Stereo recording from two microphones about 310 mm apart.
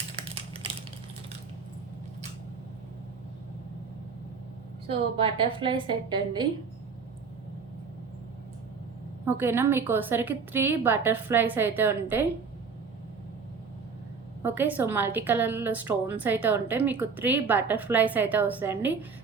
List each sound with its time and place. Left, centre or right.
4.9 s a woman's voice: centre
9.2 s a woman's voice: centre
14.4 s a woman's voice: centre